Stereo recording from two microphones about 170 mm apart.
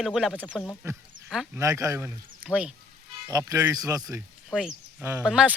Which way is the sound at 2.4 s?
5° right (ahead or behind).